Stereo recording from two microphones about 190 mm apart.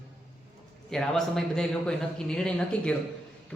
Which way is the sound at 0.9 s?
Centre (ahead or behind).